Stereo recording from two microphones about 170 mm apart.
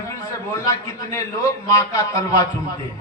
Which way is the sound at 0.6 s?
20° left (ahead or behind).